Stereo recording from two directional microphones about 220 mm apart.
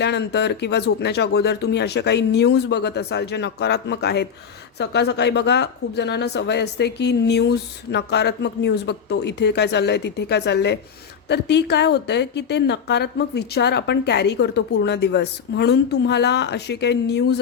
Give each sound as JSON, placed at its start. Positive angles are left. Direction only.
{"t": 0.0, "sound": "a woman's voice", "side_deg": 50}